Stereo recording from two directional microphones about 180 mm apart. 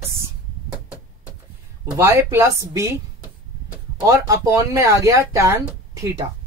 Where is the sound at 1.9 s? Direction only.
15° right (ahead or behind).